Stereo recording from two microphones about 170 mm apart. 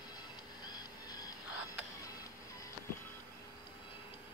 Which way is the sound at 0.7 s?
25° left (ahead or behind).